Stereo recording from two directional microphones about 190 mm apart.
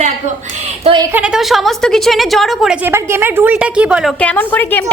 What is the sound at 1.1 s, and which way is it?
A woman's voice, 5° right (ahead or behind).